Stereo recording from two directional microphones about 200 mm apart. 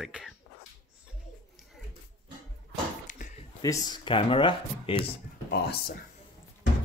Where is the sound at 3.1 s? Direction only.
40° left (ahead or behind).